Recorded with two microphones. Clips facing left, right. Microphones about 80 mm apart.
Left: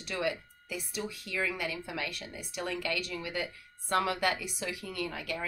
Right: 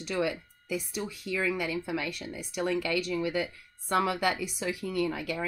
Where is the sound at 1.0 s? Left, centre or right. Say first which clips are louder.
Right 2 dB; centre.